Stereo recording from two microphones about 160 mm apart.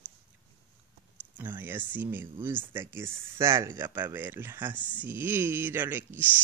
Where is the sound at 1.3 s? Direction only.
10° right (ahead or behind).